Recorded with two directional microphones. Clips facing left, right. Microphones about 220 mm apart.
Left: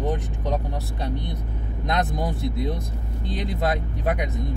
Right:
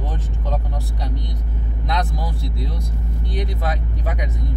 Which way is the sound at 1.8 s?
20° left (ahead or behind).